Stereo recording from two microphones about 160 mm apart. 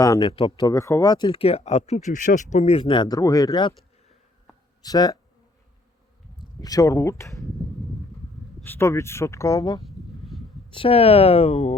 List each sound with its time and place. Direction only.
0.0 s speech: 25° left (ahead or behind)
4.8 s speech: 25° left (ahead or behind)
6.6 s speech: 20° left (ahead or behind)
8.6 s speech: 15° left (ahead or behind)
9.8 s a sound: centre (ahead or behind)
10.7 s speech: 35° left (ahead or behind)